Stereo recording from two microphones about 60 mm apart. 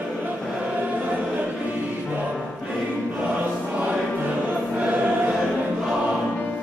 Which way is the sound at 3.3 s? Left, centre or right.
Right.